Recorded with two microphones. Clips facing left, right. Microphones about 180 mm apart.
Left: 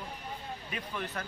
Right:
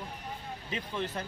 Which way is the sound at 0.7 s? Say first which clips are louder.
Right 4 dB; 25° right (ahead or behind).